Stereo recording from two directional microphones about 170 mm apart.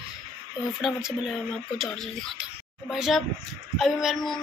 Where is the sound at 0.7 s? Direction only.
Centre (ahead or behind).